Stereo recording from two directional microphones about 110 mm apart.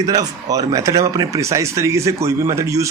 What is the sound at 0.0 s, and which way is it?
Speech, 35° right (ahead or behind).